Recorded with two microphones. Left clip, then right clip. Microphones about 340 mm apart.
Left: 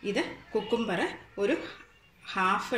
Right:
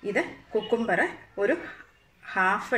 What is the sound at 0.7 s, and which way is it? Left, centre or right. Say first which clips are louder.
Speech: right 6 dB; right.